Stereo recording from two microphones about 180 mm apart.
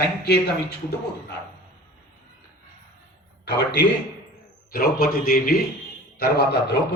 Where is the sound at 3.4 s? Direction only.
70° left (ahead or behind).